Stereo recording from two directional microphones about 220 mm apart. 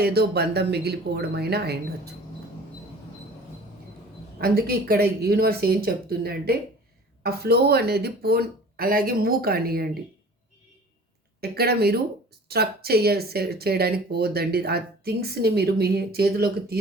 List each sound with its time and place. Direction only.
0.0 s speech: 45° right (ahead or behind)
4.4 s speech: 45° right (ahead or behind)
11.3 s speech: 45° right (ahead or behind)